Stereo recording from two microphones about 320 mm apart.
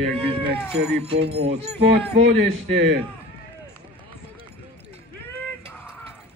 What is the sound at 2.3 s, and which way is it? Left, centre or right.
Speech, right.